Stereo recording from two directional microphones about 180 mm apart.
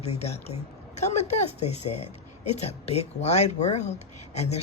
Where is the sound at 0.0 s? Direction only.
35° left (ahead or behind).